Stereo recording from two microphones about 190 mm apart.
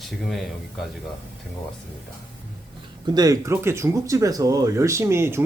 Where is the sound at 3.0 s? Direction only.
20° right (ahead or behind).